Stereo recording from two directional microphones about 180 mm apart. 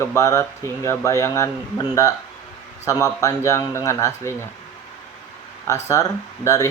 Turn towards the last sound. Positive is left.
turn(degrees=15)  # may be behind; listen again after turning